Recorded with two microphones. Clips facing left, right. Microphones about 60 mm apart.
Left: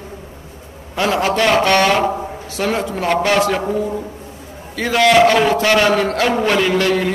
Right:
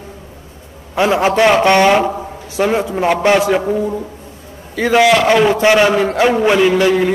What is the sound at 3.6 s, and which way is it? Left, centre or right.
Speech, centre.